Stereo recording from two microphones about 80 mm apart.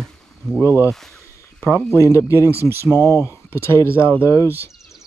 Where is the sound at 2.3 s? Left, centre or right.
Right.